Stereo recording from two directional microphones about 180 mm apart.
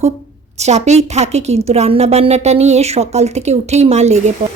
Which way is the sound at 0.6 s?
40° right (ahead or behind).